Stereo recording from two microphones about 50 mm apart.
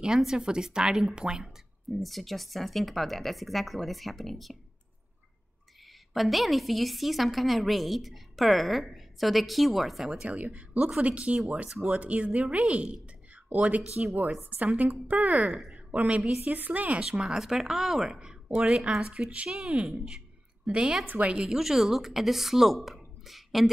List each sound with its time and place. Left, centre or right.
0.2 s speech: centre
1.9 s a woman's voice: centre
6.1 s a woman's voice: centre
10.0 s speech: centre
10.3 s a woman's voice: right
17.2 s speech: centre
19.9 s a sound: centre
21.0 s a woman's voice: right
21.5 s a woman's voice: centre